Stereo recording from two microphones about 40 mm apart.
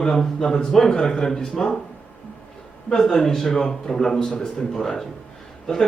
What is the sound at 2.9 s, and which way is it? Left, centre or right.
Speech, centre.